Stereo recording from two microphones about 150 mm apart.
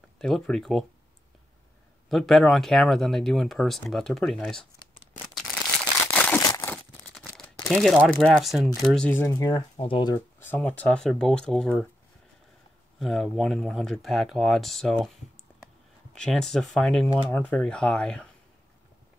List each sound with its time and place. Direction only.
0.2 s speech: 5° left (ahead or behind)
2.0 s speech: centre (ahead or behind)
6.0 s a sound: 10° left (ahead or behind)
7.6 s speech: centre (ahead or behind)
9.2 s speech: 25° left (ahead or behind)
9.8 s speech: 35° left (ahead or behind)
10.1 s speech: 15° left (ahead or behind)
13.0 s speech: centre (ahead or behind)
16.2 s speech: 5° left (ahead or behind)